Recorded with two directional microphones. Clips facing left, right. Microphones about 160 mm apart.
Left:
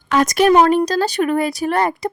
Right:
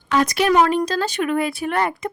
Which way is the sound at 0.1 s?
45° left (ahead or behind).